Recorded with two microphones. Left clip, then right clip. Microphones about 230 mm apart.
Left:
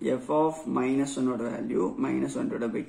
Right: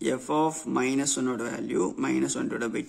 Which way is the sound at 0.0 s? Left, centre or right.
Right.